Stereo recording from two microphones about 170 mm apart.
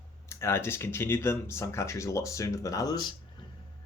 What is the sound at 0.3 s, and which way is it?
Speech, 15° left (ahead or behind).